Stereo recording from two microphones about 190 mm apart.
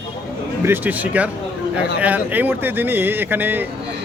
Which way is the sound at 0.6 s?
10° right (ahead or behind).